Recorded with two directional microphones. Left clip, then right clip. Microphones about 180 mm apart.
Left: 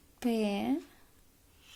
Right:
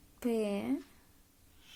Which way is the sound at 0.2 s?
35° left (ahead or behind).